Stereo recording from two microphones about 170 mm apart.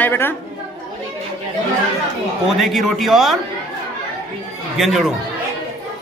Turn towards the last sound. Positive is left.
turn(degrees=-5)  # may be behind; listen again after turning